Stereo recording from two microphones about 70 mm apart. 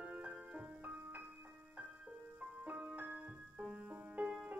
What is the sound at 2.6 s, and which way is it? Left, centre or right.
Music, right.